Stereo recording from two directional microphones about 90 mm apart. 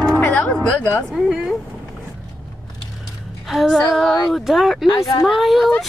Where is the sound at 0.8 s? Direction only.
25° left (ahead or behind).